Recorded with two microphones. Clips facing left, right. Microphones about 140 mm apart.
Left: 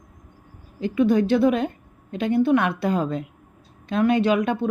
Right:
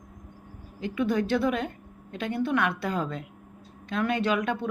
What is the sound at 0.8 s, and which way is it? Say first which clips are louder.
A woman's voice: left 7 dB; 30° left (ahead or behind).